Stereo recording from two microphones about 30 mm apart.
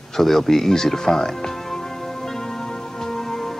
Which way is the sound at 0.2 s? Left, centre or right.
Centre.